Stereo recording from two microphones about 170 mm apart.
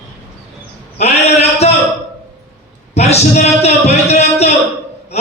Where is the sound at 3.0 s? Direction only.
40° left (ahead or behind).